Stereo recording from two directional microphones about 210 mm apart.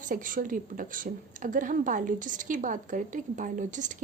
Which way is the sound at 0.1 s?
40° right (ahead or behind).